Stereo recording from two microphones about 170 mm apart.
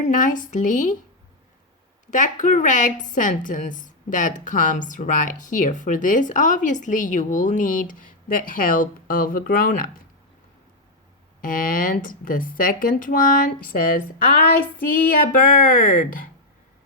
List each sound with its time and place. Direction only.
0.1 s a woman's voice: 50° left (ahead or behind)
2.0 s a woman's voice: 50° left (ahead or behind)
11.3 s speech: 55° left (ahead or behind)